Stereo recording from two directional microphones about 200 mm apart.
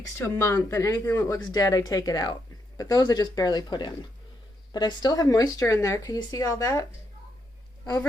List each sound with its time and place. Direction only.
0.0 s speech: 15° left (ahead or behind)